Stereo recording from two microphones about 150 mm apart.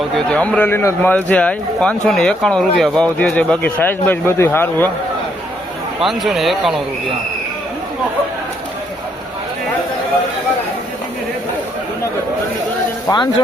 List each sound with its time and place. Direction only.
0.1 s a man's voice: 5° left (ahead or behind)
6.0 s speech: centre (ahead or behind)
13.1 s speech: 25° left (ahead or behind)